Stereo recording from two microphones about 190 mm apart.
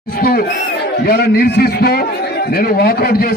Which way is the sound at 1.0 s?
55° left (ahead or behind).